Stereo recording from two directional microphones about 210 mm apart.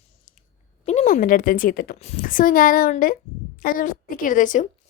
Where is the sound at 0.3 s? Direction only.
35° left (ahead or behind).